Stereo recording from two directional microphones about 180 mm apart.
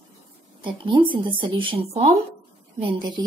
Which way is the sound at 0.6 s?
30° right (ahead or behind).